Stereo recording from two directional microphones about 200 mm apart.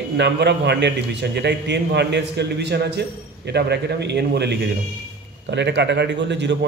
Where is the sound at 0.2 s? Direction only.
60° right (ahead or behind).